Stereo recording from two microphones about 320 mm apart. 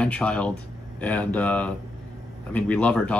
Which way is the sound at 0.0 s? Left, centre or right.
Centre.